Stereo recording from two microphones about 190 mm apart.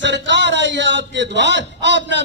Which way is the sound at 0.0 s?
70° right (ahead or behind).